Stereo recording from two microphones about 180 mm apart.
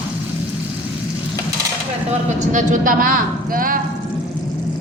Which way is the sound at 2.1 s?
45° right (ahead or behind).